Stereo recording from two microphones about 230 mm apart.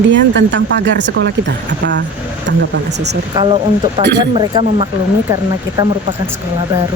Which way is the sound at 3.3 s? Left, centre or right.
Centre.